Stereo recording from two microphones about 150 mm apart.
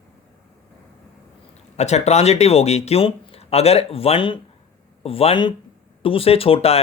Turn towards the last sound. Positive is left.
turn(degrees=40)  # may be behind; listen again after turning